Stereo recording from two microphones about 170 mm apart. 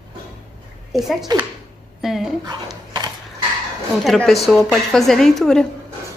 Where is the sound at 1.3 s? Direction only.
25° right (ahead or behind).